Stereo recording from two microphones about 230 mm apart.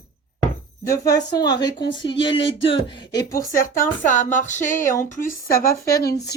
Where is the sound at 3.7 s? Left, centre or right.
Left.